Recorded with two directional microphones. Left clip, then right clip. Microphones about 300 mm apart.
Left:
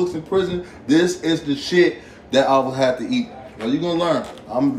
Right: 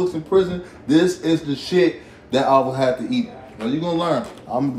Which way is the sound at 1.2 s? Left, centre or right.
Centre.